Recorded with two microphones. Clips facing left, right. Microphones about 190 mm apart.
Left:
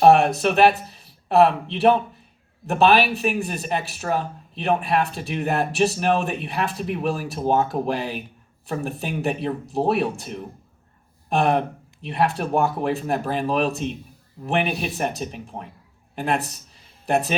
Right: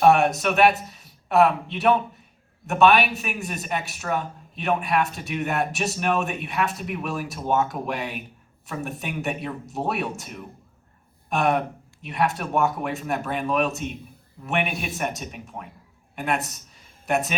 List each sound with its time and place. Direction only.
0.0 s speech: 30° left (ahead or behind)